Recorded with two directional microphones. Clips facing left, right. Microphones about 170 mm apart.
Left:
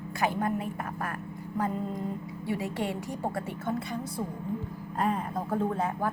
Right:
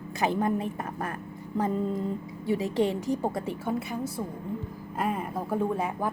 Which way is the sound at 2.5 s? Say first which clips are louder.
Right 6 dB; 20° right (ahead or behind).